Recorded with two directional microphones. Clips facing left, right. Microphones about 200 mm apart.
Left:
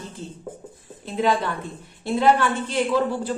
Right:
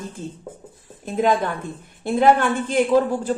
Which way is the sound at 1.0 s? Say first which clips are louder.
Right 2 dB; 45° right (ahead or behind).